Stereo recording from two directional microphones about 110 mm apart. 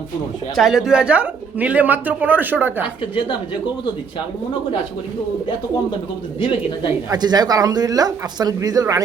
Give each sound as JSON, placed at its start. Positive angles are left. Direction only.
{"t": 0.5, "sound": "speech", "side_deg": 0}
{"t": 6.4, "sound": "speech", "side_deg": 50}
{"t": 7.1, "sound": "speech", "side_deg": -40}